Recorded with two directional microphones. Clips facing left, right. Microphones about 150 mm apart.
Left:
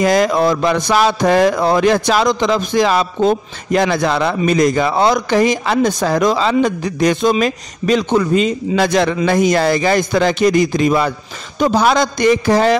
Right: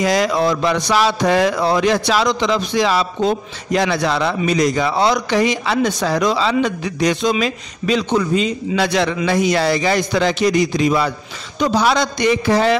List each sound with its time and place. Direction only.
0.0 s speech: 50° left (ahead or behind)